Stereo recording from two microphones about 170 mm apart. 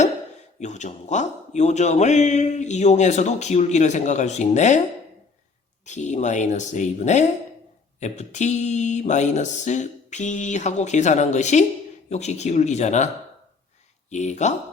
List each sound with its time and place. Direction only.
0.6 s a man's voice: 45° left (ahead or behind)
5.8 s a man's voice: 45° left (ahead or behind)
14.1 s a man's voice: 45° left (ahead or behind)